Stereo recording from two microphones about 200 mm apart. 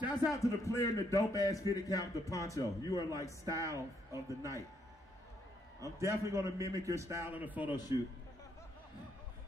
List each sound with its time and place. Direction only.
0.3 s a man's voice: 15° left (ahead or behind)
3.4 s a man's voice: 15° right (ahead or behind)
5.8 s a man's voice: 15° right (ahead or behind)